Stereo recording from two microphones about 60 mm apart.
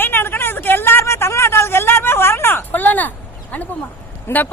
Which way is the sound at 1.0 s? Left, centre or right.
Left.